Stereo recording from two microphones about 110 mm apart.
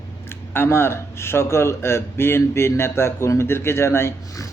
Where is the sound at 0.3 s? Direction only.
20° left (ahead or behind).